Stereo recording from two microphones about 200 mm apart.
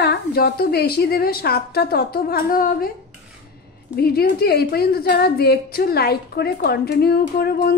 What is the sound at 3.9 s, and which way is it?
A woman's voice, 50° left (ahead or behind).